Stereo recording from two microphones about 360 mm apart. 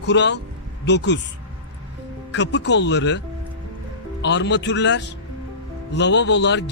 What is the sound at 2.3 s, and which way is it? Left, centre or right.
Speech, left.